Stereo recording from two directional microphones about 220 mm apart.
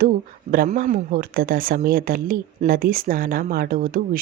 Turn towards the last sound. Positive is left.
turn(degrees=-40)  # may be behind; listen again after turning